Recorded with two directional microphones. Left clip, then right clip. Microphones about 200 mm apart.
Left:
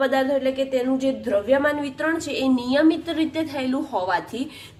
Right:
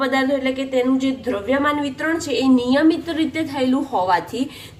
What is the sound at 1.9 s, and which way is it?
A woman's voice, 20° left (ahead or behind).